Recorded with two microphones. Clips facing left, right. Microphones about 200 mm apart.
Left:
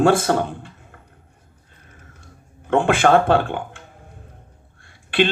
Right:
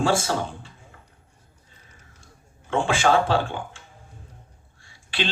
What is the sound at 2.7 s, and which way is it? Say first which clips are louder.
Speech: left 5 dB; 55° left (ahead or behind).